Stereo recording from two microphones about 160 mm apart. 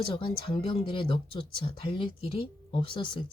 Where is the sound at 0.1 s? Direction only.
30° left (ahead or behind).